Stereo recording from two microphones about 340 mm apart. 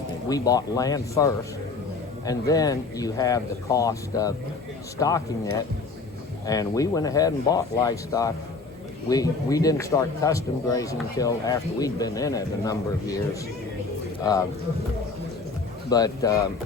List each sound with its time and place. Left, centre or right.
0.3 s speech: centre
15.9 s speech: centre